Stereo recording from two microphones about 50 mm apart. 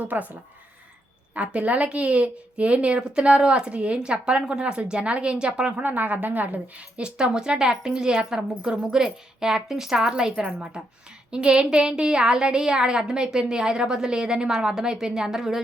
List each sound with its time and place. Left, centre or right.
0.0 s speech: right
1.4 s a woman's voice: right
5.8 s a woman's voice: right; by 15.6 s centre